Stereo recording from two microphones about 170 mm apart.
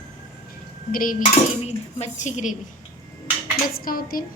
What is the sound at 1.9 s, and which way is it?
Speech, 40° left (ahead or behind).